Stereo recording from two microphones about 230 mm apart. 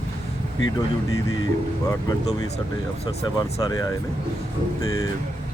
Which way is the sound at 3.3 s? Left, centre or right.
Centre.